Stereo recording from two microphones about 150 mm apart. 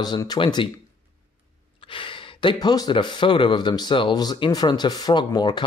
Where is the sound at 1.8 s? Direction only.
35° left (ahead or behind).